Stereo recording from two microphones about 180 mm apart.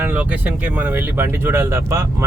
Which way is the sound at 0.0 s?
10° right (ahead or behind).